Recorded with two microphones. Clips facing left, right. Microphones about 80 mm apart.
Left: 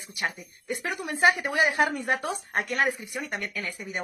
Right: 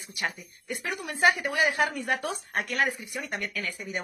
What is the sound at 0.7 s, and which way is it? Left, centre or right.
A woman's voice, left.